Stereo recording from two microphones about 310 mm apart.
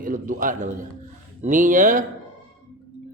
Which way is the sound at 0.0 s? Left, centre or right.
Right.